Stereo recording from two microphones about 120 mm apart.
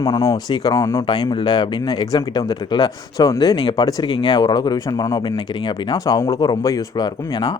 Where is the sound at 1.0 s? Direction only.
40° left (ahead or behind).